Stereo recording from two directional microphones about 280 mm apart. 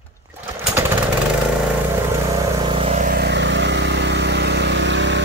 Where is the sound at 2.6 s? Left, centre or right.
Centre; by 5.2 s right.